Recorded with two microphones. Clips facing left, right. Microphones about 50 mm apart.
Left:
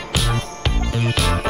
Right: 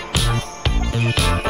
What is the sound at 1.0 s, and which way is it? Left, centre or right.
Music, centre.